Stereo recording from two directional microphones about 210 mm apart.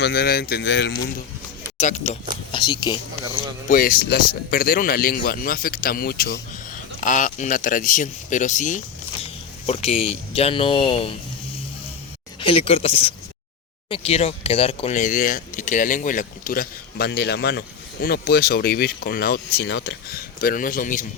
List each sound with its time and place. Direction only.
0.0 s speech: 50° left (ahead or behind)
1.8 s speech: 35° left (ahead or behind)
2.5 s speech: 20° left (ahead or behind)
3.7 s speech: 45° left (ahead or behind); by 11.1 s 25° left (ahead or behind)
12.4 s speech: 25° left (ahead or behind)